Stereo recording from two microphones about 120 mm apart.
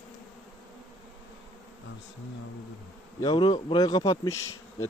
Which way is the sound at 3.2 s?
40° left (ahead or behind).